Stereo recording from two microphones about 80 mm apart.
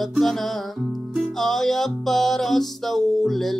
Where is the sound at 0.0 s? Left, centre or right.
Centre.